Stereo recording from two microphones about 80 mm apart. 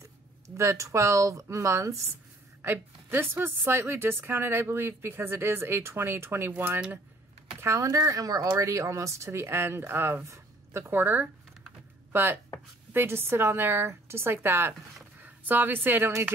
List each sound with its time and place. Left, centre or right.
0.6 s speech: right
2.6 s speech: right
7.6 s speech: right